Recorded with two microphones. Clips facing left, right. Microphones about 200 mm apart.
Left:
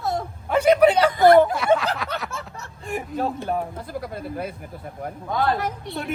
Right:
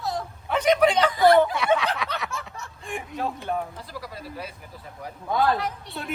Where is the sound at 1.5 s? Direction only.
Centre (ahead or behind).